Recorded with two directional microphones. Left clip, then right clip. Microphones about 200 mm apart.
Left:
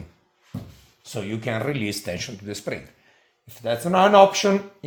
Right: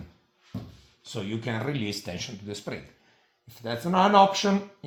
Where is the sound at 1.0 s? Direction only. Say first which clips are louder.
Left 4 dB; 45° left (ahead or behind).